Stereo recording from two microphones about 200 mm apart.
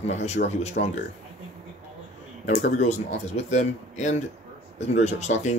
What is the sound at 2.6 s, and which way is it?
Speech, 40° left (ahead or behind).